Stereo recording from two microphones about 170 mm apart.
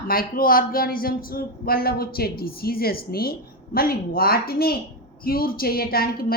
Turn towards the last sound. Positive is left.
turn(degrees=60)  # may be behind; listen again after turning